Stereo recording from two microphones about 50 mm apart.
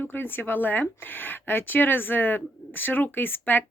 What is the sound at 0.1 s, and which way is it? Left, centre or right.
Speech, left.